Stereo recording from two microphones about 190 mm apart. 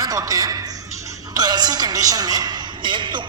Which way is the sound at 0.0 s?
20° right (ahead or behind).